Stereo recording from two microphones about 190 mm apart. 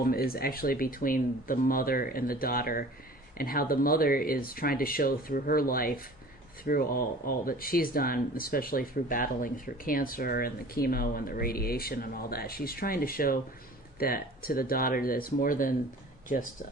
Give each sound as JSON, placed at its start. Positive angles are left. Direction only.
{"t": 0.0, "sound": "speech", "side_deg": 50}